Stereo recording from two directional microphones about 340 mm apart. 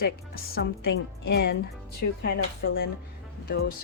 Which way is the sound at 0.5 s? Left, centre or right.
Left.